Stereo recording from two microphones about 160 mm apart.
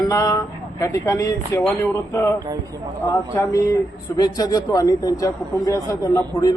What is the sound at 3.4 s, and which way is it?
A man's voice, 20° left (ahead or behind).